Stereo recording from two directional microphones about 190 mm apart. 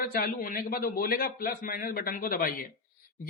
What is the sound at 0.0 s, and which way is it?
Speech, 50° left (ahead or behind).